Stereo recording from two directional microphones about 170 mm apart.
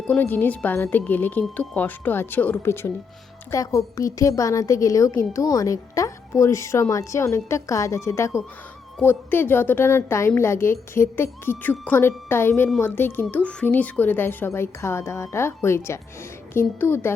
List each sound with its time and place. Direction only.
0.1 s a woman's voice: 10° left (ahead or behind)